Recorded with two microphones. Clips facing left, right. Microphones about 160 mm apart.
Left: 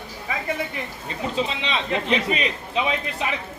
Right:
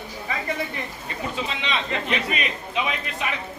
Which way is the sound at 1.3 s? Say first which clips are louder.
Left 3 dB; 30° left (ahead or behind).